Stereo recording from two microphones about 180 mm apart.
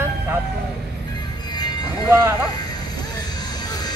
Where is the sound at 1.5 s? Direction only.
20° left (ahead or behind).